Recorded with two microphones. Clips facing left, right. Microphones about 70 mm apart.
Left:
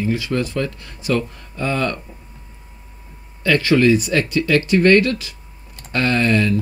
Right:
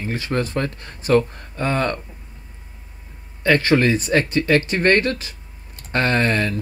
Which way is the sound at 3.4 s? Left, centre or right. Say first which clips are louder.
Left 2 dB; right.